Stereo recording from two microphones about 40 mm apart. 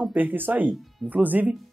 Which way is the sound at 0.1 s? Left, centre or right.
Right.